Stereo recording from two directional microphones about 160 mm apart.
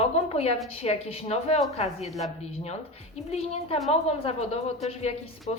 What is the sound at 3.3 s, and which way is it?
A woman's voice, 40° left (ahead or behind).